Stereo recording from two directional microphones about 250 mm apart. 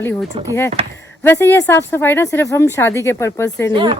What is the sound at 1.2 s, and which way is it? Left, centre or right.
Speech, centre.